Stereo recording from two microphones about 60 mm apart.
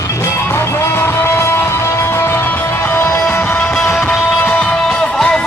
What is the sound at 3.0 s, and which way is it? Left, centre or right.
Music, left.